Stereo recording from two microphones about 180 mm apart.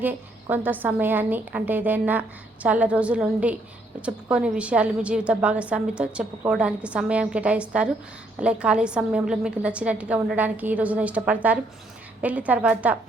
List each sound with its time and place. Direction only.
0.0 s a woman's voice: 10° right (ahead or behind)